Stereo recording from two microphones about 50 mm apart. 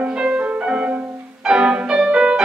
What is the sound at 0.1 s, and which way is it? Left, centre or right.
Music, centre.